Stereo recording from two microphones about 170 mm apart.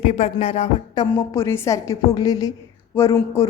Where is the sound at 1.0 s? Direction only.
20° left (ahead or behind).